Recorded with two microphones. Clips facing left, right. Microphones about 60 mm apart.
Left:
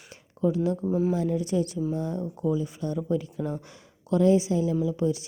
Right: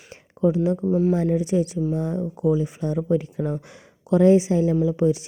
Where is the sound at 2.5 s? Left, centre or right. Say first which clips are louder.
Right 5 dB; right.